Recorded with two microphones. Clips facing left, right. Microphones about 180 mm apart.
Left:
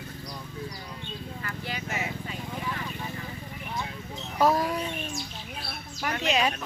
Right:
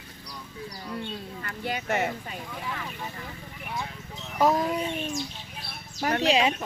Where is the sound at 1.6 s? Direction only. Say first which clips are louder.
Right 7 dB; 55° right (ahead or behind).